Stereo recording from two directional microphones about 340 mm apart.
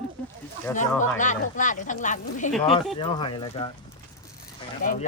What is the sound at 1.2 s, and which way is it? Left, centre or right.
Speech, left.